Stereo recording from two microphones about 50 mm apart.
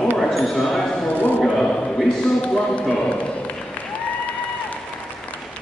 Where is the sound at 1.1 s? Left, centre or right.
Left.